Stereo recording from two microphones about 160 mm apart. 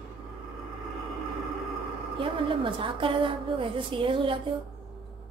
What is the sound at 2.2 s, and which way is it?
A woman's voice, 30° right (ahead or behind).